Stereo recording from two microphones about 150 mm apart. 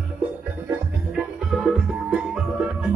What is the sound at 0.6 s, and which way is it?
Music, 5° right (ahead or behind).